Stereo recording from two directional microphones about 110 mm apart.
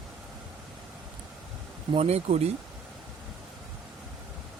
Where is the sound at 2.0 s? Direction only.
70° right (ahead or behind).